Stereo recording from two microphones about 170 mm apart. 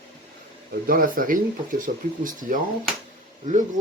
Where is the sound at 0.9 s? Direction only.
55° right (ahead or behind).